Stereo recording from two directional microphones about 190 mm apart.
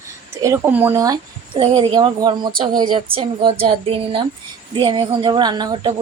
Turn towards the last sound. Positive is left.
turn(degrees=-20)  # may be behind; listen again after turning